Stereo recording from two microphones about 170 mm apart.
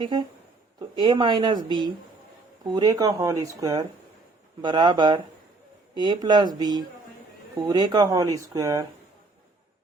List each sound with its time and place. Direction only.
0.0 s speech: 25° right (ahead or behind)